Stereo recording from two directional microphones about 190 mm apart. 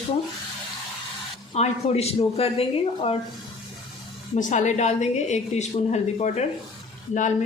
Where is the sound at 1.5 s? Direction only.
35° left (ahead or behind).